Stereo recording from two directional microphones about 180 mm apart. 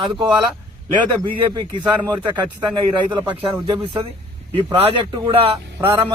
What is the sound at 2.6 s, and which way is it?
A man's voice, 25° right (ahead or behind).